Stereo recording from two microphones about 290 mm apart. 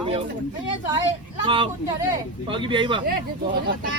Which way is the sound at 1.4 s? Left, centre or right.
Centre.